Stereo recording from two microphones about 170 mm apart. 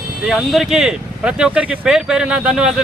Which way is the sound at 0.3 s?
Centre (ahead or behind).